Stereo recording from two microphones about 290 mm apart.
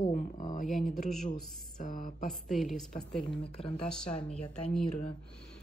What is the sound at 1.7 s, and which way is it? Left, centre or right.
Speech, left.